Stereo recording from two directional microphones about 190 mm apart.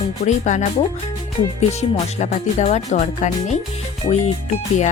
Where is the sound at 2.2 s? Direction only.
35° left (ahead or behind).